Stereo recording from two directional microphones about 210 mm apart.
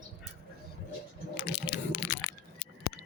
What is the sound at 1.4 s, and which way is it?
Typing, 50° left (ahead or behind).